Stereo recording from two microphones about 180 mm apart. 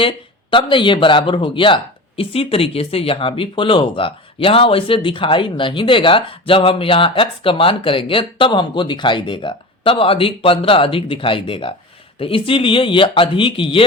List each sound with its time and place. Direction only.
0.5 s speech: 25° left (ahead or behind)